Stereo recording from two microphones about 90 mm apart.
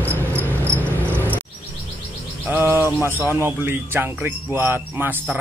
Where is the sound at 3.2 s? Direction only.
25° right (ahead or behind).